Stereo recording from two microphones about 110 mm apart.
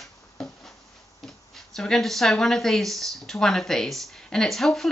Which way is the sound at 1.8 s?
5° left (ahead or behind).